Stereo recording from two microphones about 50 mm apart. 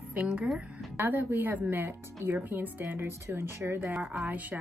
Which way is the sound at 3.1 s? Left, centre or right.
Right.